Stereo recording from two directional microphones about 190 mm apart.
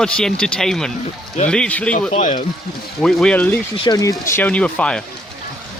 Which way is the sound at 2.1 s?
40° left (ahead or behind).